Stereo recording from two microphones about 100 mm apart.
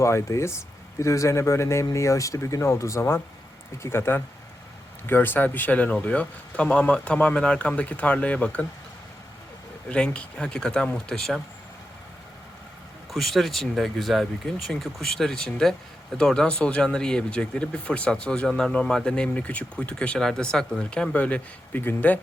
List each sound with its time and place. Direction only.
0.0 s speech: 30° left (ahead or behind)
9.9 s speech: 10° left (ahead or behind)
13.1 s speech: centre (ahead or behind); by 22.2 s 20° left (ahead or behind)